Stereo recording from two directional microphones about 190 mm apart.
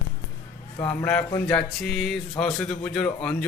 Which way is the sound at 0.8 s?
5° left (ahead or behind).